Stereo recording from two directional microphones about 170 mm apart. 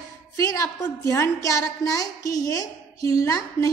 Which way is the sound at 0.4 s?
20° left (ahead or behind).